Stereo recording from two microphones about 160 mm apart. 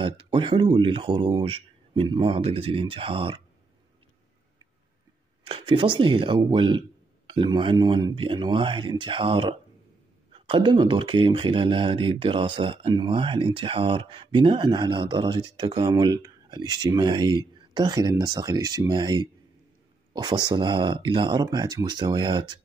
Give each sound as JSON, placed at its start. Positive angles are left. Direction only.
{"t": 0.0, "sound": "speech", "side_deg": -30}
{"t": 5.4, "sound": "speech", "side_deg": -35}